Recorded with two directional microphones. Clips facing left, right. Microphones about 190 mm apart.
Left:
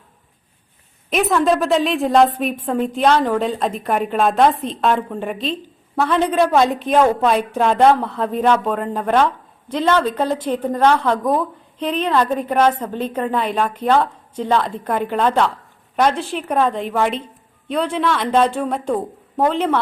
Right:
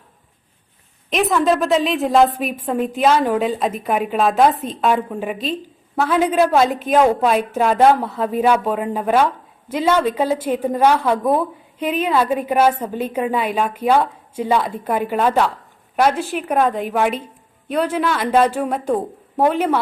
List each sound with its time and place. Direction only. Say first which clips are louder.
1.1 s a woman's voice: even; centre (ahead or behind)